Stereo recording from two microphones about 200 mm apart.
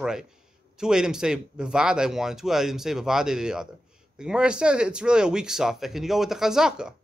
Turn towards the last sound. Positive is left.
turn(degrees=-5)  # may be behind; listen again after turning